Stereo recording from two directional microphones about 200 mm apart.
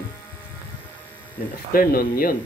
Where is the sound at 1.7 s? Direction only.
50° left (ahead or behind).